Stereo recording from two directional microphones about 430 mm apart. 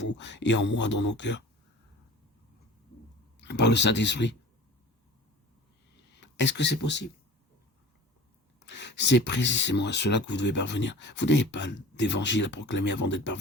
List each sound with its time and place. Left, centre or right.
0.2 s speech: left
3.4 s speech: left
6.1 s speech: left
8.6 s speech: left